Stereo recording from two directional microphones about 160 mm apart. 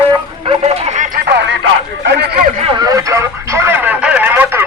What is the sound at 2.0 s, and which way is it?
Speech, 90° right.